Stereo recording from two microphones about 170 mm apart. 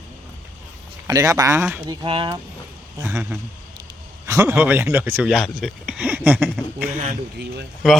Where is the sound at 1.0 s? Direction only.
20° right (ahead or behind).